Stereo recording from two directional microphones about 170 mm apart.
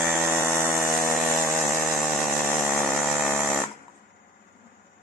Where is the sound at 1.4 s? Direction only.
10° right (ahead or behind).